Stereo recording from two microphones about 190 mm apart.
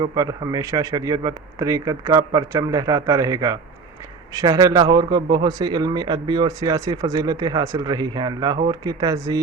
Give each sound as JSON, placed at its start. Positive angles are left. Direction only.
{"t": 0.0, "sound": "a man's voice", "side_deg": -20}